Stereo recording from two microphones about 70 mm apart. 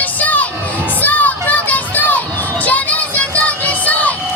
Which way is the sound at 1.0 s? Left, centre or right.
Left.